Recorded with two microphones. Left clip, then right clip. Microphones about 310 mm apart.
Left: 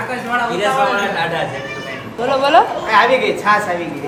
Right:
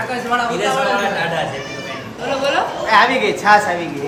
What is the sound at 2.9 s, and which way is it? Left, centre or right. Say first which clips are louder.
Speech: right 3 dB; right.